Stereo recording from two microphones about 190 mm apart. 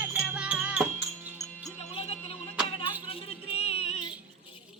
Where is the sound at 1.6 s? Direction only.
30° left (ahead or behind).